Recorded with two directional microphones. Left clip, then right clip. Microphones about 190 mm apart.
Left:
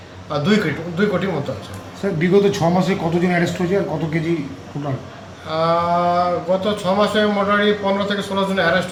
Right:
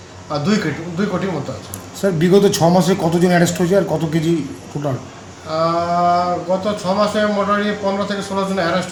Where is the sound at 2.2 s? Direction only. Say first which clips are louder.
Right 2 dB; 65° right (ahead or behind).